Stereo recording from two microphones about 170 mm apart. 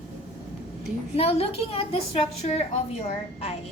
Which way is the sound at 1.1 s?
35° left (ahead or behind).